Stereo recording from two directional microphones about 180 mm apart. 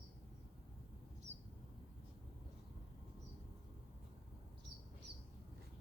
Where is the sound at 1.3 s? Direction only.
35° right (ahead or behind).